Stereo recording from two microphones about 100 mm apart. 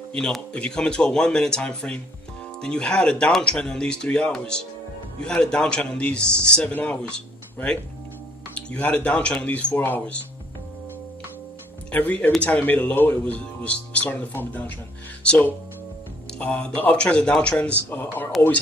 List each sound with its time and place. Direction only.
0.1 s a man's voice: 10° left (ahead or behind)
11.9 s a man's voice: 15° left (ahead or behind)